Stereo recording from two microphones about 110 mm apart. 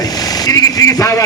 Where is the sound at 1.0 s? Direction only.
30° left (ahead or behind).